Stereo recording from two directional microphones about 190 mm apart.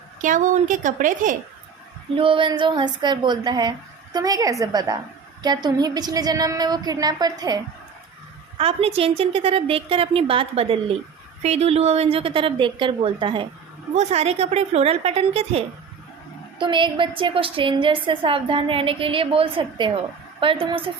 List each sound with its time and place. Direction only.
0.2 s a woman's voice: 45° right (ahead or behind)
2.1 s a woman's voice: 25° right (ahead or behind)
8.5 s a woman's voice: 30° right (ahead or behind)